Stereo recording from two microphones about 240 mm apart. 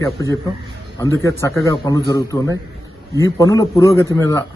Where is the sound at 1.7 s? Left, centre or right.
Centre.